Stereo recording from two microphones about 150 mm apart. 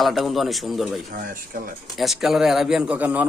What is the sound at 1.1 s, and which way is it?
Speech, 70° right (ahead or behind).